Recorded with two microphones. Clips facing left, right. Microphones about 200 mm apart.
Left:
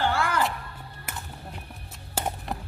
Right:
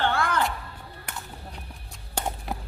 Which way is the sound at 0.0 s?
10° left (ahead or behind).